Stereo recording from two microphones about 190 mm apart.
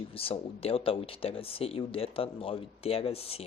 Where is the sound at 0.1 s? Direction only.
30° left (ahead or behind).